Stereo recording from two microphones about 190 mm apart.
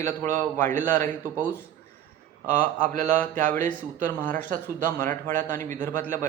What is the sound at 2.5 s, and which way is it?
Speech, 45° right (ahead or behind).